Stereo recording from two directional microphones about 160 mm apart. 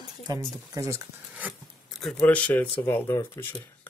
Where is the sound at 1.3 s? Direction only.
10° right (ahead or behind); by 3.9 s 15° left (ahead or behind).